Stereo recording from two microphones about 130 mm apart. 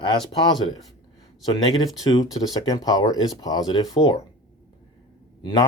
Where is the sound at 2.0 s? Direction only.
30° left (ahead or behind).